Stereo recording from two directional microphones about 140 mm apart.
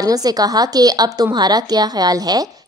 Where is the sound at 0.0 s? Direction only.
25° right (ahead or behind).